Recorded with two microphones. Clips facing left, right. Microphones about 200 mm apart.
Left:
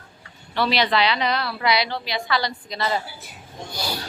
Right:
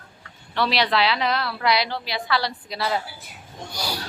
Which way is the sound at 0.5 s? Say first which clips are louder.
Left 1 dB; centre (ahead or behind).